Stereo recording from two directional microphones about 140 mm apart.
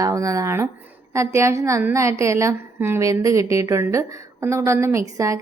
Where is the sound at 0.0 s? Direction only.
25° right (ahead or behind).